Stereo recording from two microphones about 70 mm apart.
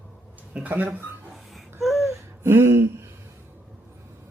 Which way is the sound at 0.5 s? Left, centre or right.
Right.